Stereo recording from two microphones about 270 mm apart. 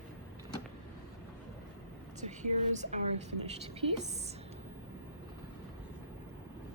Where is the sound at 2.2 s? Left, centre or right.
Right.